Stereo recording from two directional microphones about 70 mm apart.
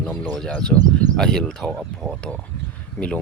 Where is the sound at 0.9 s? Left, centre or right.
Centre.